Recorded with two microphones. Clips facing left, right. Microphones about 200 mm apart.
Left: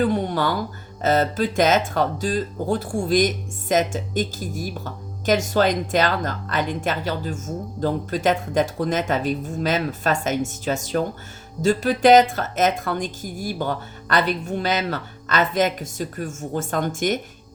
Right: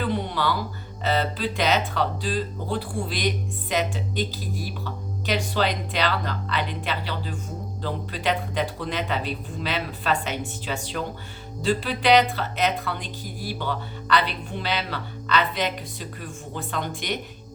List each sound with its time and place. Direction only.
0.0 s music: 45° left (ahead or behind)
1.0 s speech: 45° left (ahead or behind)